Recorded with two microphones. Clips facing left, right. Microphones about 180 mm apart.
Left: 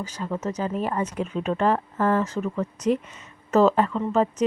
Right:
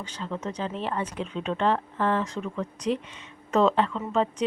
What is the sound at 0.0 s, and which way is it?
Speech, 10° left (ahead or behind).